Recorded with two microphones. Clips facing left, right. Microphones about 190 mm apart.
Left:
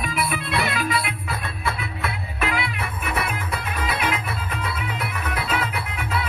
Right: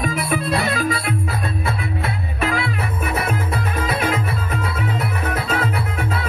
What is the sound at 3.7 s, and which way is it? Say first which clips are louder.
Music: right 4 dB; 45° right (ahead or behind).